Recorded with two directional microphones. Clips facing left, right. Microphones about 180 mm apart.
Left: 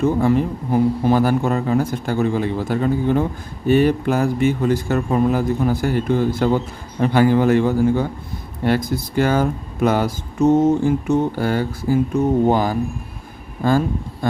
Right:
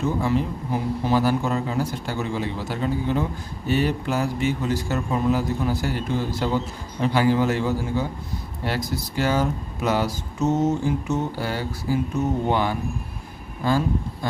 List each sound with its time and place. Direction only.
0.0 s a man's voice: 50° left (ahead or behind)